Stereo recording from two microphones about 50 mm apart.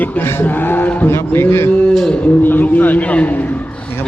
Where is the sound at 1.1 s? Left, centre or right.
Left.